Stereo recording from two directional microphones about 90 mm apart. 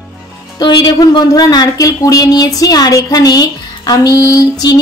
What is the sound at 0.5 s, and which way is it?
Speech, 55° left (ahead or behind).